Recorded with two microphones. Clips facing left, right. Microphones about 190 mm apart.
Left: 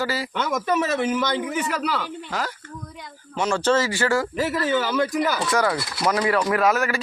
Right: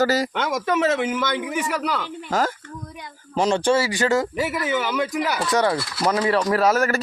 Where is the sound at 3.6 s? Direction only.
10° right (ahead or behind).